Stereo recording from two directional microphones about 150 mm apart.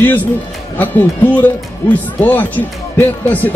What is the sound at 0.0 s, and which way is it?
A man's voice, 10° left (ahead or behind).